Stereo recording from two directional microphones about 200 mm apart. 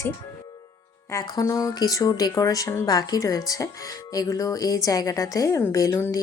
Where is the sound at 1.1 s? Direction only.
20° left (ahead or behind).